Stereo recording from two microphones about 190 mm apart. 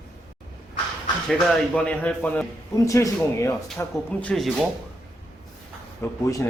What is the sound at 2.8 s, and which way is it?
Speech, 15° left (ahead or behind).